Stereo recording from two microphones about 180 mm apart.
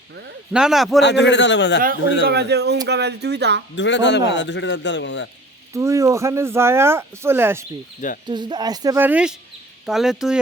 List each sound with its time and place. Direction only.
0.5 s speech: 5° right (ahead or behind)
1.0 s speech: 80° left
2.2 s a man's voice: 65° right (ahead or behind)
3.8 s speech: 85° left
5.7 s speech: 15° right (ahead or behind)
8.3 s speech: 25° right (ahead or behind); by 10.3 s centre (ahead or behind)